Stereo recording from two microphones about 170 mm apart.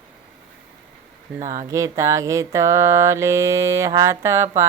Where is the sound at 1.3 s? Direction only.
20° right (ahead or behind).